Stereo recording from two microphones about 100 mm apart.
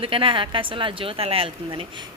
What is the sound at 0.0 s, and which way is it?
A woman's voice, 60° right (ahead or behind).